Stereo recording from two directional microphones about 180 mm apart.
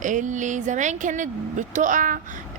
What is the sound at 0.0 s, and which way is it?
A woman's voice, 45° right (ahead or behind).